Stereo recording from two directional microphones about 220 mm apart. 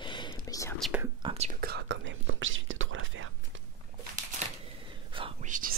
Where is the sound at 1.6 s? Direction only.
50° right (ahead or behind).